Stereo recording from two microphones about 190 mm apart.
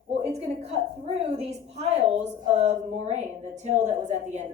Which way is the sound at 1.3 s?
35° right (ahead or behind).